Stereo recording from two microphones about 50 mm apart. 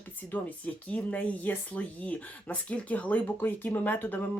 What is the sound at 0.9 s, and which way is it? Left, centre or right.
Speech, left.